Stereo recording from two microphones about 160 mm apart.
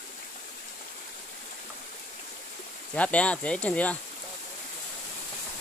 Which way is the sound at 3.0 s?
10° left (ahead or behind).